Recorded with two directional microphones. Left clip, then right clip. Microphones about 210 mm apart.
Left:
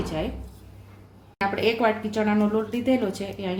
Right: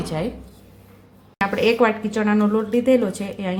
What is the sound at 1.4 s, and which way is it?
A woman's voice, 25° right (ahead or behind).